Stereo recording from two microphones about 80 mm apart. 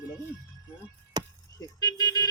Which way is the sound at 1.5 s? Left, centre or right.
Left.